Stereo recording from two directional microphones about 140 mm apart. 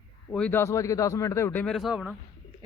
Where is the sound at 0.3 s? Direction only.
10° left (ahead or behind).